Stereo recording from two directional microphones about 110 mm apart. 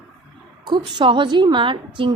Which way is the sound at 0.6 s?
45° right (ahead or behind).